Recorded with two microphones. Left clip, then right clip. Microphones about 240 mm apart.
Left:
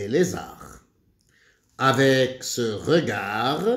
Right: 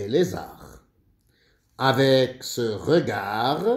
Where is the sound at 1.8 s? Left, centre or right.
Centre.